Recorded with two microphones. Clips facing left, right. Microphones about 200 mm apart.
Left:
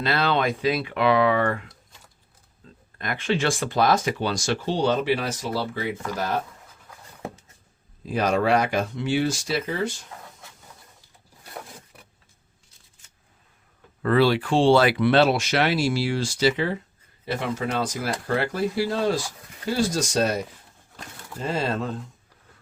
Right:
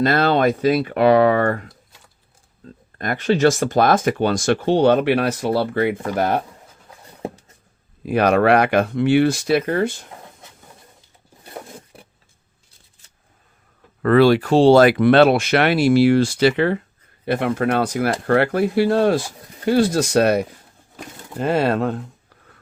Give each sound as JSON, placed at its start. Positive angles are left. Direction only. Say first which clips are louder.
{"t": 0.0, "sound": "speech", "louder": "right 7 dB", "side_deg": -45}
{"t": 2.6, "sound": "a sound", "louder": "right 8 dB", "side_deg": -40}
{"t": 3.0, "sound": "speech", "louder": "right 8 dB", "side_deg": -45}
{"t": 7.2, "sound": "a sound", "louder": "right 6 dB", "side_deg": -35}
{"t": 8.0, "sound": "speech", "louder": "right 7 dB", "side_deg": -65}
{"t": 11.9, "sound": "vehicle", "louder": "right 6 dB", "side_deg": -30}
{"t": 14.0, "sound": "speech", "louder": "right 6 dB", "side_deg": -55}